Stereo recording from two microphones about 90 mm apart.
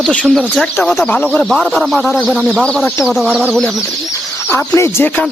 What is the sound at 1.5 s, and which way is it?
Speech, 5° left (ahead or behind).